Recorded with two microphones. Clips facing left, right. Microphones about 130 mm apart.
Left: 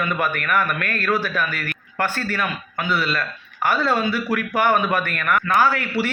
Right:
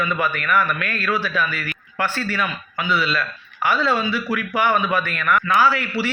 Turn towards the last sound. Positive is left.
turn(degrees=50)  # may be behind; listen again after turning